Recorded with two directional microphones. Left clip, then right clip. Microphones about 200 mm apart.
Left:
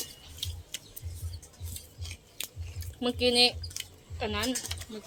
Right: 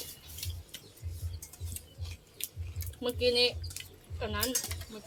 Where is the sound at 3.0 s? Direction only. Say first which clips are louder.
Left 3 dB; 55° left (ahead or behind).